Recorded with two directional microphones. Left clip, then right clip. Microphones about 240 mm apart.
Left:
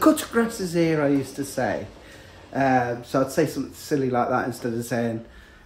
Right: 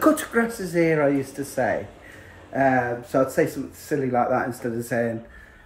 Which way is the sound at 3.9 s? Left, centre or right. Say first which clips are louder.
Right 1 dB; centre.